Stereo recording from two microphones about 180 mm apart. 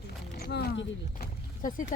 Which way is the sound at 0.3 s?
60° left (ahead or behind).